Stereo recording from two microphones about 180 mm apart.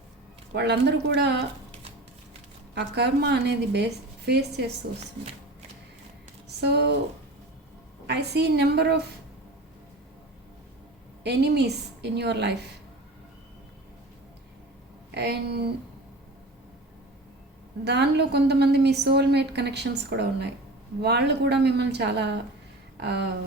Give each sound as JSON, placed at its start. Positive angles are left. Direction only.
{"t": 0.5, "sound": "a woman's voice", "side_deg": -70}
{"t": 2.7, "sound": "a woman's voice", "side_deg": -70}
{"t": 6.6, "sound": "a woman's voice", "side_deg": -70}
{"t": 8.0, "sound": "a woman's voice", "side_deg": -70}
{"t": 11.2, "sound": "a woman's voice", "side_deg": -70}
{"t": 15.1, "sound": "speech", "side_deg": -65}
{"t": 17.8, "sound": "a woman's voice", "side_deg": -70}